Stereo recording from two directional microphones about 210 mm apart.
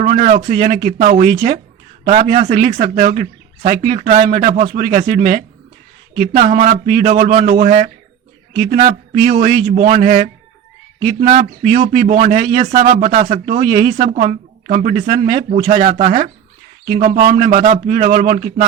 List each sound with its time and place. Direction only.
0.0 s a man's voice: 35° right (ahead or behind)